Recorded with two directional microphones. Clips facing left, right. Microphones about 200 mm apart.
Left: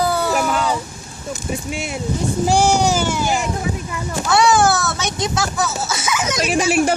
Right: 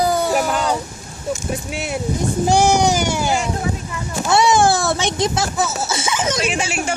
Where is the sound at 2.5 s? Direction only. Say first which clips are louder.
Right 1 dB; 15° right (ahead or behind).